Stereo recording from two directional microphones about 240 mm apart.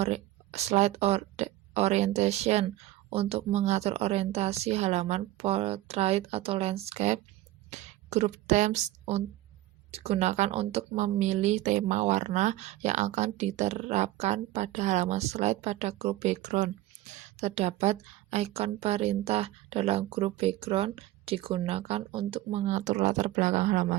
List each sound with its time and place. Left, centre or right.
0.0 s a woman's voice: right